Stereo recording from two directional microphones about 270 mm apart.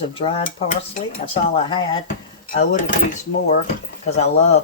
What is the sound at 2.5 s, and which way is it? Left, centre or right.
Speech, left.